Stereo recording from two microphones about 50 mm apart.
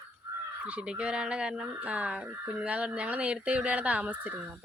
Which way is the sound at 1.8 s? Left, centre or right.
Right.